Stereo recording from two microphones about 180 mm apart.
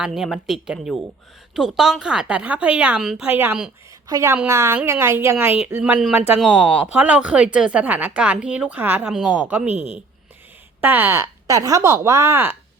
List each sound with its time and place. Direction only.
0.0 s a woman's voice: centre (ahead or behind)
6.4 s a woman's voice: 5° left (ahead or behind)
6.8 s speech: 5° right (ahead or behind)
10.8 s speech: 10° right (ahead or behind)